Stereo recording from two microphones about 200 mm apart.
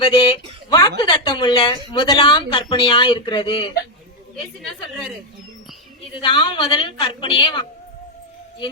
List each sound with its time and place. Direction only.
0.0 s speech: 25° left (ahead or behind)
6.1 s speech: 25° left (ahead or behind)